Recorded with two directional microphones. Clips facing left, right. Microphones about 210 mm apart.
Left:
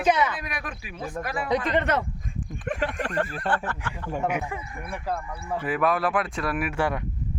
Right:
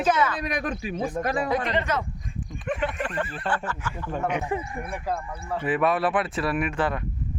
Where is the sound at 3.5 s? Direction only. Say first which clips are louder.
Left 1 dB; 60° left (ahead or behind).